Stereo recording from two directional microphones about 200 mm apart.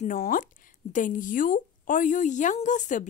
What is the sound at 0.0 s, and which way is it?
A woman's voice, 45° left (ahead or behind).